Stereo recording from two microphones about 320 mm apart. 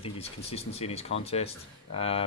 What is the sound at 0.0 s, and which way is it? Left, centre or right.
Speech, centre.